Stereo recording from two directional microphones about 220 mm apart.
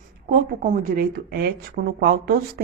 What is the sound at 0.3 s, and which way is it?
A woman's voice, 40° right (ahead or behind).